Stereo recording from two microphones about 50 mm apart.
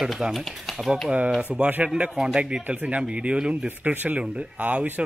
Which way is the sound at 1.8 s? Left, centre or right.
Right.